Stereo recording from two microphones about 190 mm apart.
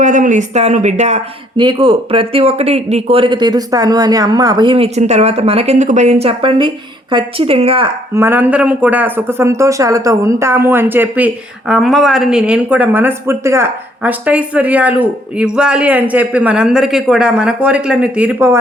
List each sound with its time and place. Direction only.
0.0 s a woman's voice: 40° right (ahead or behind)
1.5 s speech: 25° right (ahead or behind)
8.1 s speech: 10° right (ahead or behind)